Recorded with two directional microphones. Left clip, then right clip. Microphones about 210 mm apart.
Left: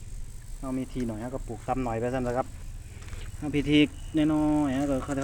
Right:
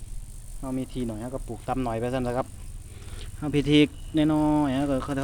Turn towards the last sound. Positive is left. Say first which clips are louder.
# right 2 dB
turn(degrees=-15)  # may be behind; listen again after turning